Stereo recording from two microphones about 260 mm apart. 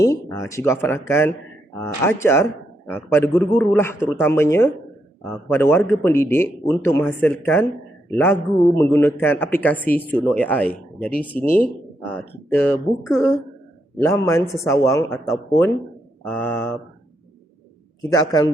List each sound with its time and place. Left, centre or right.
0.0 s a man's voice: centre
11.4 s speech: left
12.1 s a man's voice: centre
16.2 s a man's voice: centre
18.1 s a man's voice: centre